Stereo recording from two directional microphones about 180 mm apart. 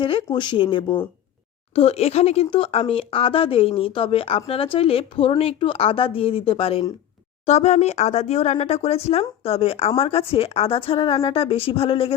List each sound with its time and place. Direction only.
0.0 s speech: 25° left (ahead or behind)